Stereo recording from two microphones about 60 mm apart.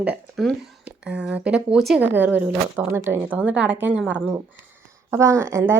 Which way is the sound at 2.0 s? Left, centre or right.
Right.